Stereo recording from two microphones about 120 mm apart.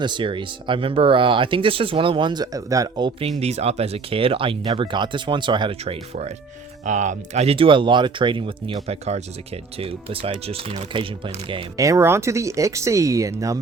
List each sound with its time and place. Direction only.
0.0 s speech: 40° right (ahead or behind)
3.2 s speech: 60° right (ahead or behind); by 5.7 s 40° right (ahead or behind)
5.8 s speech: 60° right (ahead or behind)
6.8 s speech: 85° right; by 11.6 s 45° right (ahead or behind)
11.8 s speech: 25° right (ahead or behind)